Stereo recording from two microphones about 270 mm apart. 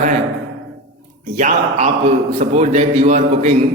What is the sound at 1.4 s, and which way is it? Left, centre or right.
A man's voice, right.